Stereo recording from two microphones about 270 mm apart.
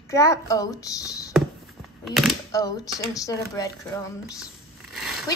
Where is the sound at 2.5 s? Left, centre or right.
Centre.